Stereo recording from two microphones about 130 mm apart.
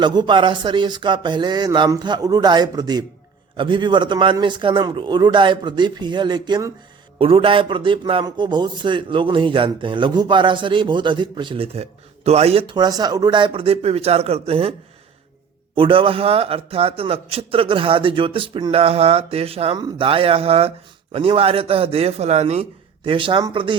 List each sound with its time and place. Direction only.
0.0 s a man's voice: 35° right (ahead or behind); by 12.6 s 50° right (ahead or behind)
12.6 s a man's voice: 35° right (ahead or behind); by 19.7 s 50° right (ahead or behind)
19.7 s a man's voice: 40° right (ahead or behind); by 22.6 s 55° right (ahead or behind)
23.0 s speech: 40° right (ahead or behind)